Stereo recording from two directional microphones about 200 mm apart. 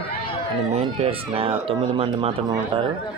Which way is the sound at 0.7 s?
30° right (ahead or behind).